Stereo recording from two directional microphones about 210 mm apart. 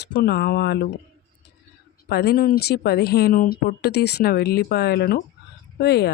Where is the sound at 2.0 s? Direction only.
50° left (ahead or behind).